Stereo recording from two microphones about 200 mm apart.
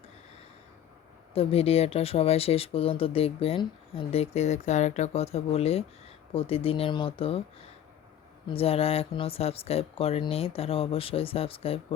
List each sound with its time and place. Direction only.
1.3 s speech: 30° left (ahead or behind)
8.4 s speech: 30° left (ahead or behind)